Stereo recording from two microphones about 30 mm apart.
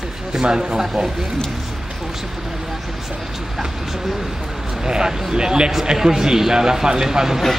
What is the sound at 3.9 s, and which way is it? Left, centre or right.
Speech, centre.